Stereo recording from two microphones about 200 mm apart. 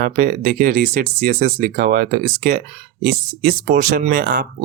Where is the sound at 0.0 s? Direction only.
45° right (ahead or behind).